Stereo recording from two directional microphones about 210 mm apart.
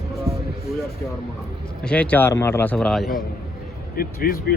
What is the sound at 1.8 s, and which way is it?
Speech, 5° left (ahead or behind).